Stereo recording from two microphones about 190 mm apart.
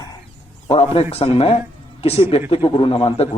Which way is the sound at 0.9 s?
30° left (ahead or behind).